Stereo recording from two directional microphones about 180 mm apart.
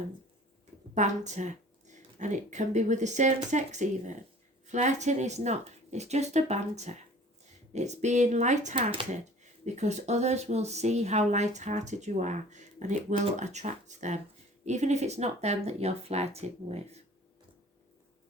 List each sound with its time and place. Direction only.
0.9 s speech: 40° right (ahead or behind)